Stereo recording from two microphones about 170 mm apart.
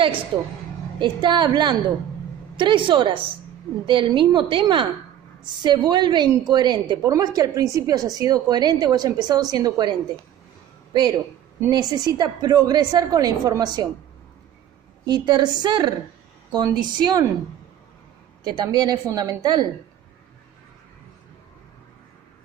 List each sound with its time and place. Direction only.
0.9 s a woman's voice: 25° right (ahead or behind)
15.0 s a woman's voice: 25° right (ahead or behind)
18.4 s a woman's voice: 25° right (ahead or behind)